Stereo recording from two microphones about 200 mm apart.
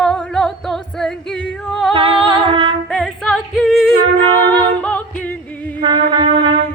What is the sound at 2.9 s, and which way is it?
A capella, centre (ahead or behind).